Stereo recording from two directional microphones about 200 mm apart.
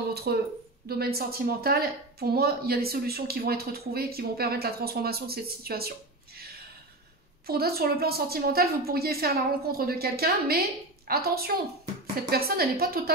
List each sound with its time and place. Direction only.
0.1 s a woman's voice: 55° right (ahead or behind)
7.4 s a woman's voice: 50° right (ahead or behind)